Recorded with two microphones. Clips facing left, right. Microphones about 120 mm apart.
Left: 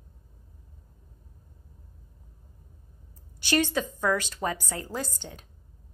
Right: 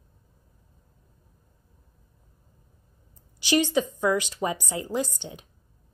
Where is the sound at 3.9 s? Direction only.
15° right (ahead or behind).